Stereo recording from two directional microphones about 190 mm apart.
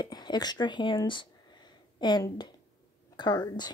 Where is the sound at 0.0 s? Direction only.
20° left (ahead or behind).